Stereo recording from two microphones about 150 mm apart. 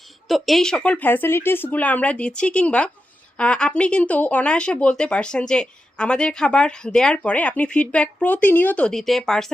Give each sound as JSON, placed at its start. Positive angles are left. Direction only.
{"t": 0.3, "sound": "speech", "side_deg": 0}